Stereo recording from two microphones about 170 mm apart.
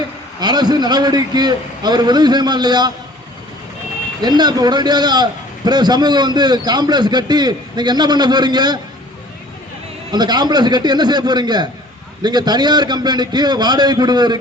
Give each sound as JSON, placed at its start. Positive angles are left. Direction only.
{"t": 0.3, "sound": "a man's voice", "side_deg": -25}
{"t": 4.2, "sound": "a man's voice", "side_deg": -25}
{"t": 10.1, "sound": "a man's voice", "side_deg": -25}